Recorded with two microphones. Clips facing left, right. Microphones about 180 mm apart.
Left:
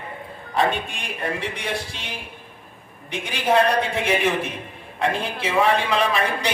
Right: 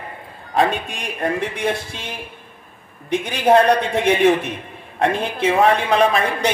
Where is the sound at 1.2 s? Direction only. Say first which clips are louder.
Right 7 dB; 50° right (ahead or behind).